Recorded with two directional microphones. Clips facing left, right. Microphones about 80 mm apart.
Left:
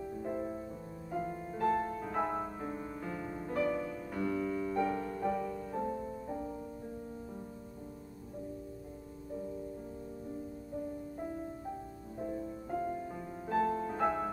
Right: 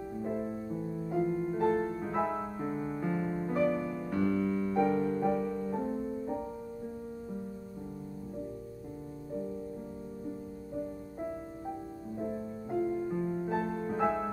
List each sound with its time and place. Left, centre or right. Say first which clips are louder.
0.2 s music: right 3 dB; centre
4.1 s music: right 5 dB; centre
12.7 s music: right 6 dB; centre
13.5 s music: left 1 dB; centre